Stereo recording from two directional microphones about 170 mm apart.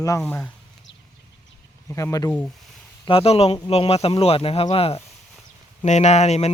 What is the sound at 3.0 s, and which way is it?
Speech, 35° left (ahead or behind).